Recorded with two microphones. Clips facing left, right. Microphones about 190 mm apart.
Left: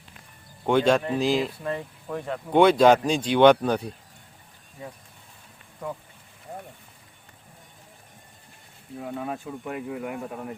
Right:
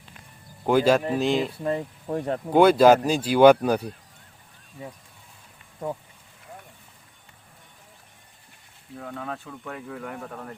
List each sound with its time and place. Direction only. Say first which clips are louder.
0.6 s speech: right 1 dB; 5° right (ahead or behind)
1.6 s speech: right 4 dB; 30° right (ahead or behind)
2.5 s speech: right 1 dB; 5° right (ahead or behind)
9.0 s speech: left 3 dB; 15° left (ahead or behind)